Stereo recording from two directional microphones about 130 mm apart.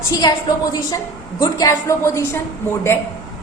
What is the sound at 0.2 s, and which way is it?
A woman's voice, 30° left (ahead or behind).